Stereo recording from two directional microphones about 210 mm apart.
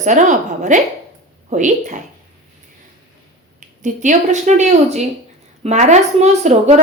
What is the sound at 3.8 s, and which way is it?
Speech, 35° right (ahead or behind).